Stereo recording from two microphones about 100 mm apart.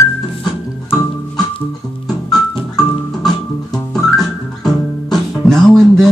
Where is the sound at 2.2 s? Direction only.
5° left (ahead or behind).